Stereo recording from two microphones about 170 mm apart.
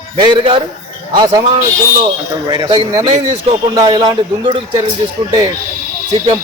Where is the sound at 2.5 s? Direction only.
25° right (ahead or behind).